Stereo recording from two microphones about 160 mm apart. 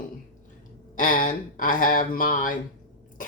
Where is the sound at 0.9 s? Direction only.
55° left (ahead or behind).